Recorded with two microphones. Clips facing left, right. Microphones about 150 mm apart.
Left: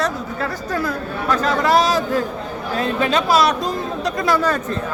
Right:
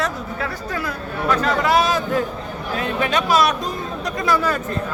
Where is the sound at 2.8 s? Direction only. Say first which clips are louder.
Left 3 dB; 30° left (ahead or behind).